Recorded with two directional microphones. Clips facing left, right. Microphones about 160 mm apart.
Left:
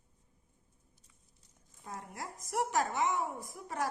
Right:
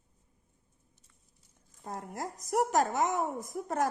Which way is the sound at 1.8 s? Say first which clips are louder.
Right 6 dB; 40° right (ahead or behind).